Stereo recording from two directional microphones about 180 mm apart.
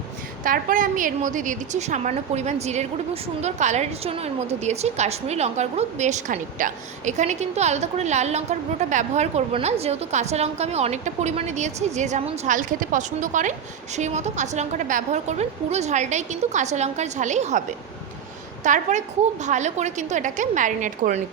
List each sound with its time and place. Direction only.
0.4 s a woman's voice: 50° right (ahead or behind)
18.6 s a woman's voice: 40° right (ahead or behind)